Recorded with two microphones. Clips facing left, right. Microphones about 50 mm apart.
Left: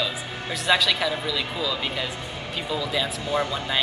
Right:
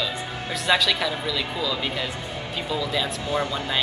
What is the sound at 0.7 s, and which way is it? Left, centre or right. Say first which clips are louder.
Speech: even; centre.